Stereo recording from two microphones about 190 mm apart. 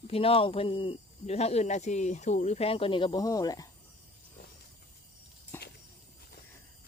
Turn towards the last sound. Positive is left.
turn(degrees=10)  # may be behind; listen again after turning